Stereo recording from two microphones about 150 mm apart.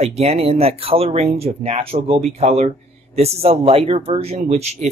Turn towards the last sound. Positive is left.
turn(degrees=-50)  # may be behind; listen again after turning